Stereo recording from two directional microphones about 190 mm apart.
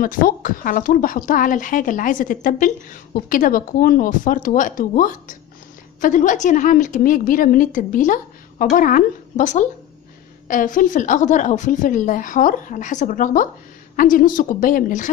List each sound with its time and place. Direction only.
0.0 s speech: 45° left (ahead or behind)